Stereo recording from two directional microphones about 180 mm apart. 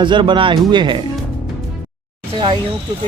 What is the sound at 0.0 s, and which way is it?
Speech, 25° right (ahead or behind).